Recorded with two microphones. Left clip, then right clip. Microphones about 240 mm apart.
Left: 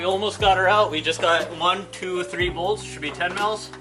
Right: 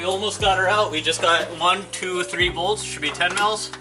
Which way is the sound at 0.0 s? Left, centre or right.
Centre.